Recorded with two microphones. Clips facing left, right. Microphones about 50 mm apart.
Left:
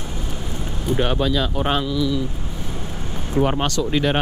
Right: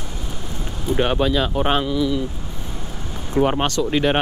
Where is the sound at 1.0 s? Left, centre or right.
Centre.